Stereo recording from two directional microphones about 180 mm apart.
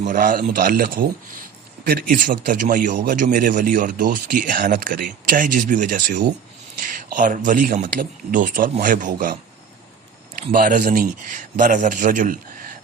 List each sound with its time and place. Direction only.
0.0 s a man's voice: 50° right (ahead or behind)
1.8 s a man's voice: 60° right (ahead or behind)
10.5 s a man's voice: 50° right (ahead or behind)